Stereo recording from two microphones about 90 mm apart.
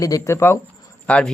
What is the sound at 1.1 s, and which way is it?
Speech, 15° left (ahead or behind).